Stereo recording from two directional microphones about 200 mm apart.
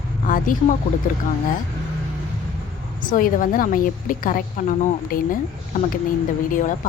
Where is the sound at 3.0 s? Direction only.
40° left (ahead or behind).